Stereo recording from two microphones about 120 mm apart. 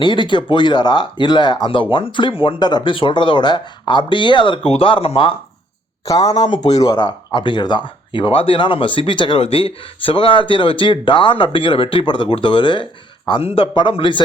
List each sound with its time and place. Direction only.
0.0 s speech: 40° left (ahead or behind)
6.1 s speech: 35° left (ahead or behind)
6.7 s speech: 45° left (ahead or behind)